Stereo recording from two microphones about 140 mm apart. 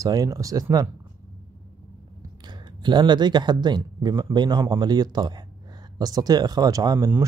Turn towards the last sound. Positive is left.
turn(degrees=-25)  # may be behind; listen again after turning